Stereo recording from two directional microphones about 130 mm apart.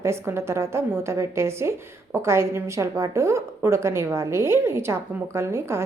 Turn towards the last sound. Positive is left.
turn(degrees=-20)  # may be behind; listen again after turning